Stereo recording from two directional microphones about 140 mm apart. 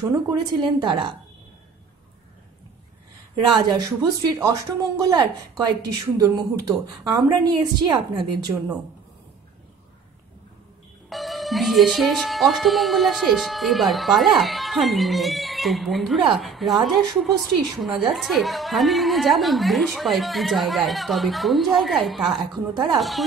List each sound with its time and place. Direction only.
0.0 s a woman's voice: 25° right (ahead or behind)
3.4 s a woman's voice: 30° right (ahead or behind)
11.1 s speech: centre (ahead or behind)